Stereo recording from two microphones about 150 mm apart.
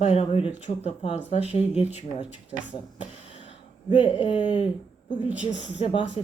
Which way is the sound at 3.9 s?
40° left (ahead or behind).